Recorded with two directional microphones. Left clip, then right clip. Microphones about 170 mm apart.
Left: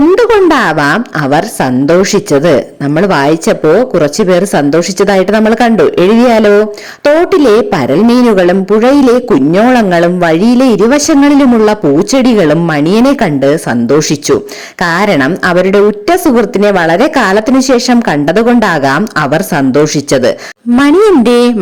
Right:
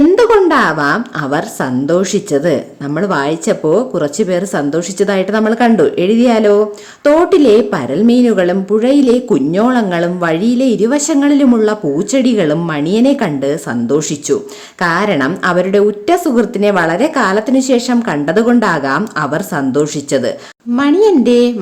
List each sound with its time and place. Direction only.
0.2 s a woman's voice: 40° left (ahead or behind)
20.7 s a woman's voice: 50° left (ahead or behind)